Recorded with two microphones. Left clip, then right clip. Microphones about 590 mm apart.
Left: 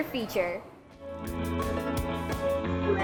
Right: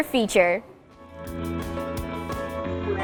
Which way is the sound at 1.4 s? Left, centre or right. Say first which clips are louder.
Right 1 dB; centre.